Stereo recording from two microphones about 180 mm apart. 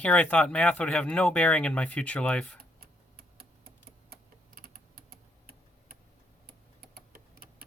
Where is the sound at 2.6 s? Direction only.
55° right (ahead or behind).